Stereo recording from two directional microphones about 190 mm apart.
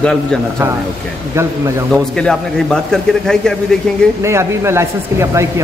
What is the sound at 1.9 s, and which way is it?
A man's voice, 5° left (ahead or behind).